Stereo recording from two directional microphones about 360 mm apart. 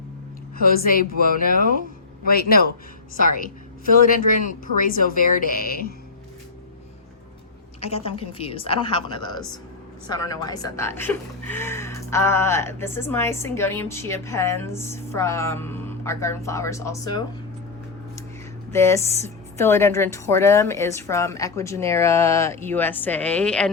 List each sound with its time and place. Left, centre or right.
0.6 s speech: left
7.8 s a woman's voice: centre
18.7 s a woman's voice: centre